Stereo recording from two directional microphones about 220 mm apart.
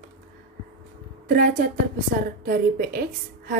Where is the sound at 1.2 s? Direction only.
40° right (ahead or behind).